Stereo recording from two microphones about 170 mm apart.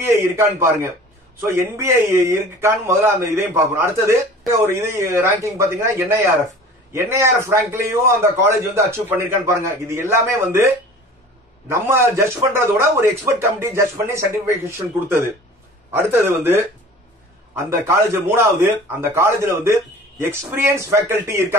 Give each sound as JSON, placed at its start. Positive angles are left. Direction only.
{"t": 0.0, "sound": "a man's voice", "side_deg": -15}
{"t": 16.0, "sound": "a man's voice", "side_deg": -15}